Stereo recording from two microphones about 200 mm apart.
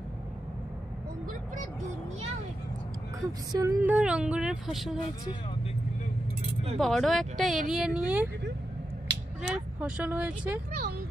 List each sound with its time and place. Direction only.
3.5 s speech: 10° right (ahead or behind)
6.8 s speech: centre (ahead or behind)
9.0 s a sound: 55° right (ahead or behind)
9.8 s speech: 5° right (ahead or behind)